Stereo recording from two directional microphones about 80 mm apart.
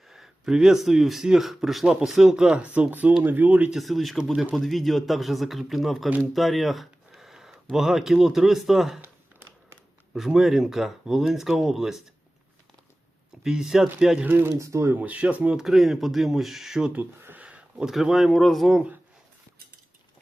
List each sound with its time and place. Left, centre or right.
0.1 s speech: centre; by 3.7 s right
3.7 s speech: centre
4.2 s speech: centre
4.5 s speech: centre
9.0 s a sound: right
10.2 s speech: centre
13.4 s speech: centre
14.3 s speech: right
14.6 s speech: right
14.9 s speech: centre
15.6 s speech: centre
16.9 s speech: right
17.4 s a sound: centre
17.9 s speech: centre